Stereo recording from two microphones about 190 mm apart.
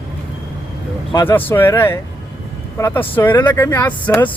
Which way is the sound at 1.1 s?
20° left (ahead or behind).